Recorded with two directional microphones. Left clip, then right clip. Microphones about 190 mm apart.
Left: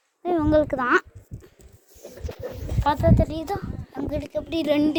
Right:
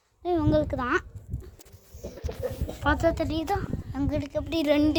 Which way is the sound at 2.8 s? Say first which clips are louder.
Left 3 dB; 5° right (ahead or behind).